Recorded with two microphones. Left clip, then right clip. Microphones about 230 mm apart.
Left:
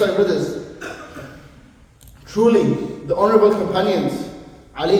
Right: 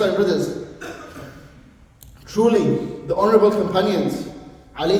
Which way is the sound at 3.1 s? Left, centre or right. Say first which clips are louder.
Left 1 dB; right.